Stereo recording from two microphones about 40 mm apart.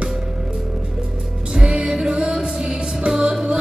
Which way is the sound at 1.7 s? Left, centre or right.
Centre.